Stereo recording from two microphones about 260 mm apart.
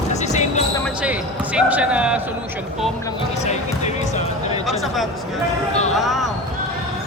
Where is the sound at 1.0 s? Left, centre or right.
Centre.